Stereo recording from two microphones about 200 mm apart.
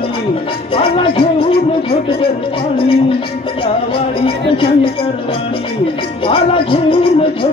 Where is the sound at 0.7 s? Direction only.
25° left (ahead or behind).